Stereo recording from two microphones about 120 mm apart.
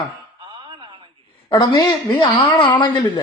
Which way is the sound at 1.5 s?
35° left (ahead or behind).